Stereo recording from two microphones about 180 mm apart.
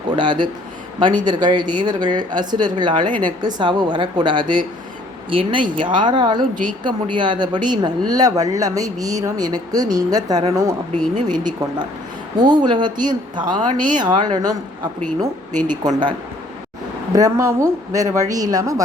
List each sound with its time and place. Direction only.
0.2 s speech: 25° right (ahead or behind)
13.7 s speech: 50° right (ahead or behind)
13.9 s speech: 25° right (ahead or behind)
15.6 s speech: 20° right (ahead or behind)